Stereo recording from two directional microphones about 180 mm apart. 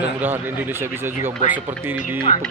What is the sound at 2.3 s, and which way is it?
Speech, 40° left (ahead or behind).